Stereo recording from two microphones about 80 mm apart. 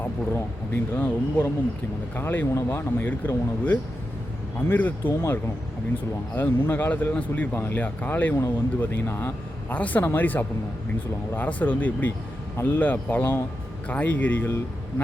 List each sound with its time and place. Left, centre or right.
0.7 s speech: left
6.3 s speech: left
7.5 s speech: left
7.8 s speech: left
9.6 s speech: centre